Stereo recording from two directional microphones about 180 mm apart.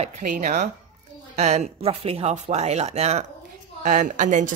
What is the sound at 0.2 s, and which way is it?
Speech, 45° right (ahead or behind).